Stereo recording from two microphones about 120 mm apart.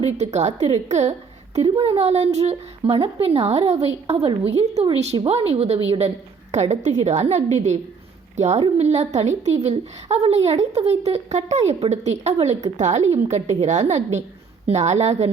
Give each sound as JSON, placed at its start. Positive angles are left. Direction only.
{"t": 0.2, "sound": "a woman's voice", "side_deg": -70}
{"t": 1.8, "sound": "a woman's voice", "side_deg": -55}
{"t": 6.5, "sound": "a woman's voice", "side_deg": -70}
{"t": 8.4, "sound": "a woman's voice", "side_deg": -65}